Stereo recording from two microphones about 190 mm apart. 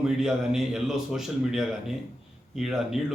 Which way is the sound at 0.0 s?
5° right (ahead or behind).